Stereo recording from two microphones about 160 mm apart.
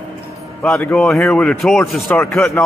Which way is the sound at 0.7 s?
10° left (ahead or behind).